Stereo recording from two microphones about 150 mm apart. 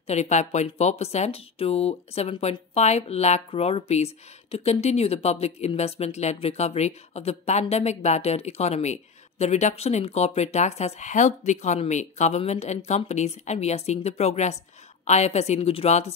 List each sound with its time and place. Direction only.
0.0 s speech: 50° left (ahead or behind)